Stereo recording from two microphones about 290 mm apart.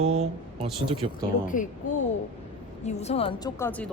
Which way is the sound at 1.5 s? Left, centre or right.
Left.